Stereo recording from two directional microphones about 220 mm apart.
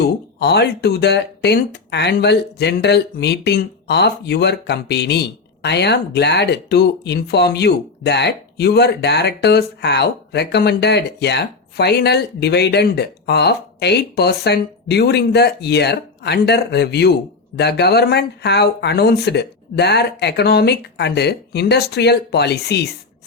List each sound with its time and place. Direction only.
0.3 s speech: 50° left (ahead or behind)